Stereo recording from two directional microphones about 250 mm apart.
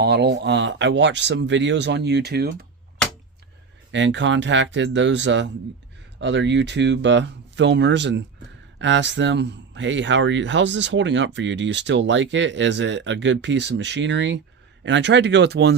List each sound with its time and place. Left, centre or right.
0.0 s speech: right
3.9 s speech: right